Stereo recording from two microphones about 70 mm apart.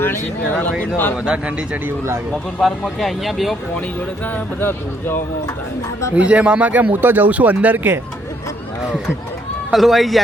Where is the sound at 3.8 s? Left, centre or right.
Left.